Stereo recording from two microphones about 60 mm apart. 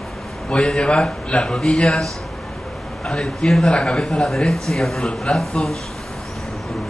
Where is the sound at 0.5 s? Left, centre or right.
Centre.